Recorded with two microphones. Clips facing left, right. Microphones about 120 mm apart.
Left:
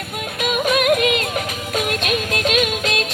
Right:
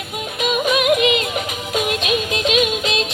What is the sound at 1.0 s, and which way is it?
Music, 50° left (ahead or behind).